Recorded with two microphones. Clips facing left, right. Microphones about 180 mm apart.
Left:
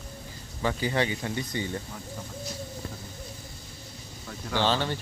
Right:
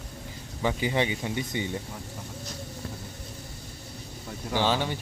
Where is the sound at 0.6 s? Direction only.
15° right (ahead or behind).